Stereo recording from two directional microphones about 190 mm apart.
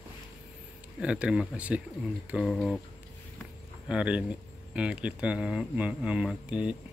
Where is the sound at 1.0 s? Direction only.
5° right (ahead or behind).